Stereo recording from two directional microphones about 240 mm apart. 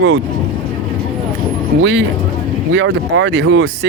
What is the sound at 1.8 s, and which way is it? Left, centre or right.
Speech, right.